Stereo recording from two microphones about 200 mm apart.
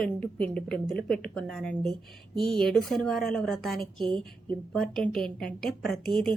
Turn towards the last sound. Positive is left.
turn(degrees=5)  # may be behind; listen again after turning